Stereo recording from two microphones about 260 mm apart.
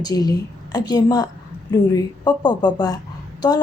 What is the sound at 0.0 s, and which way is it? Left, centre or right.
A woman's voice, centre.